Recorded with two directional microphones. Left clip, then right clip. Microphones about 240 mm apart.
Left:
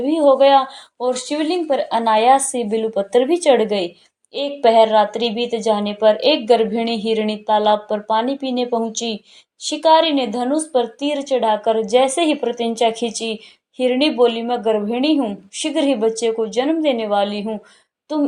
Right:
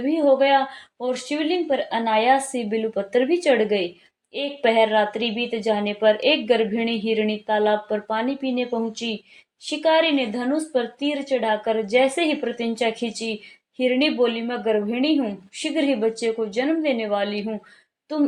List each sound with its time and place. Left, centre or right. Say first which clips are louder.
0.0 s speech: left 5 dB; left